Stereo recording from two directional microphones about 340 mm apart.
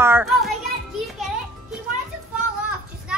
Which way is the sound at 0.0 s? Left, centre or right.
Centre.